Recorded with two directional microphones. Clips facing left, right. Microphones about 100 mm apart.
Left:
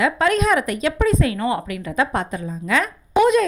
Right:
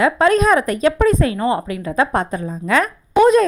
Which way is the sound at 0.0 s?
35° right (ahead or behind).